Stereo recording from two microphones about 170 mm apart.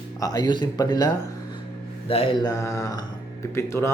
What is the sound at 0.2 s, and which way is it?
Speech, 20° left (ahead or behind).